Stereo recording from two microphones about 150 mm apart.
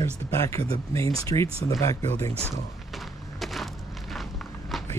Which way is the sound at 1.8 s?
20° left (ahead or behind).